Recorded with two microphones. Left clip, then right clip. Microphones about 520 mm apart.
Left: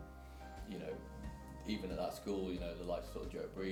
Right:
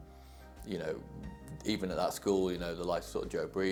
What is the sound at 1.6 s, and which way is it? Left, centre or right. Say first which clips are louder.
Speech: right 8 dB; right.